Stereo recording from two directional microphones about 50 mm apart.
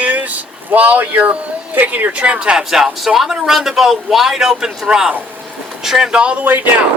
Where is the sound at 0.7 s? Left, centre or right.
Right.